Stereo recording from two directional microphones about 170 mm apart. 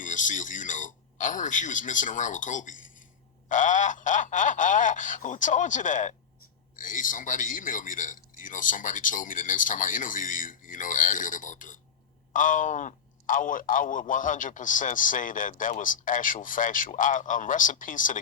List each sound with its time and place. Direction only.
0.0 s a man's voice: 50° left (ahead or behind)